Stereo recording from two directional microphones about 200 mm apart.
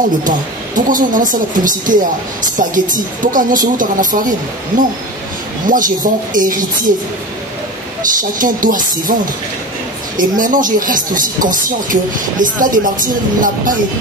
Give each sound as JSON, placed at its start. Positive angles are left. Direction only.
{"t": 0.7, "sound": "speech", "side_deg": -40}
{"t": 8.0, "sound": "speech", "side_deg": -40}
{"t": 10.1, "sound": "speech", "side_deg": -40}